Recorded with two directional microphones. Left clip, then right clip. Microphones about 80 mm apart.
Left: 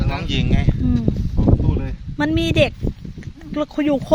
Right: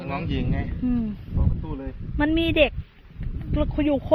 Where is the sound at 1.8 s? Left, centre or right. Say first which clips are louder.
Left 3 dB; left.